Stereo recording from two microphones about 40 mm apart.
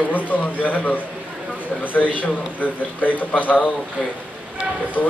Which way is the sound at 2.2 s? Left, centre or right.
Left.